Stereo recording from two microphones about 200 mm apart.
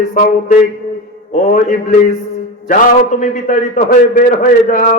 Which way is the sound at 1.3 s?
40° left (ahead or behind).